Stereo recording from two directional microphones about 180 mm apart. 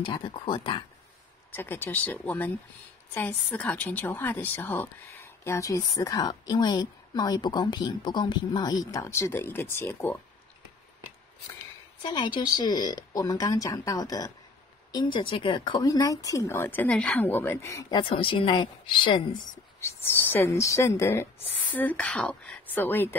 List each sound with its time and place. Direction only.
0.0 s speech: 25° left (ahead or behind)
1.5 s a woman's voice: 10° left (ahead or behind)
12.0 s speech: 25° left (ahead or behind)
19.8 s a woman's voice: 10° left (ahead or behind)